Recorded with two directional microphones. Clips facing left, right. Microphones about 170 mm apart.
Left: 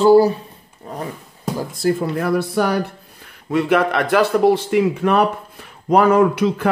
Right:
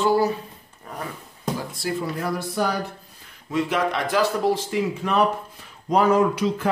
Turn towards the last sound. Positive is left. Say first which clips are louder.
# left 5 dB
turn(degrees=65)  # may be behind; listen again after turning